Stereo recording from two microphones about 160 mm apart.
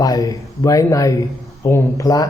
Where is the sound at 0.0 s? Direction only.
25° left (ahead or behind).